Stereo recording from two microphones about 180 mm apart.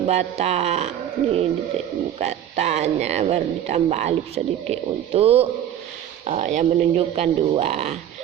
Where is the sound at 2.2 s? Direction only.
40° right (ahead or behind).